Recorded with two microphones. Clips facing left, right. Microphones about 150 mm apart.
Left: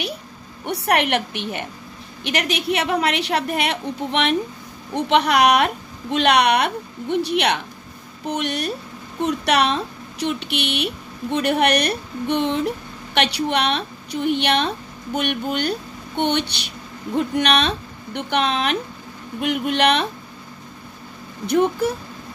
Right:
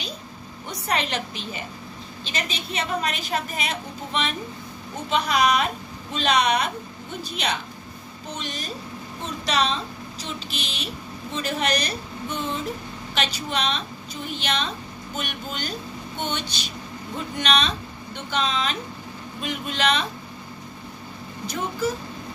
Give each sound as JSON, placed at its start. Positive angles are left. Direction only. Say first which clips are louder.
{"t": 0.7, "sound": "a woman's voice", "louder": "left 7 dB", "side_deg": 70}
{"t": 21.5, "sound": "a woman's voice", "louder": "left 8 dB", "side_deg": 60}